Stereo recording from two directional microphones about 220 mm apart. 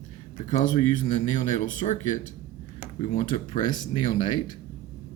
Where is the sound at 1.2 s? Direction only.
35° left (ahead or behind).